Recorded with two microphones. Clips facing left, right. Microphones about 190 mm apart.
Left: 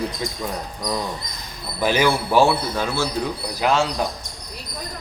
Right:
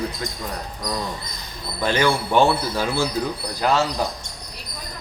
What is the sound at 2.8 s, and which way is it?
Speech, 10° right (ahead or behind).